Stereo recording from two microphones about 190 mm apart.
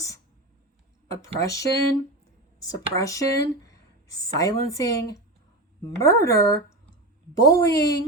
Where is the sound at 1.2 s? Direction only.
15° left (ahead or behind).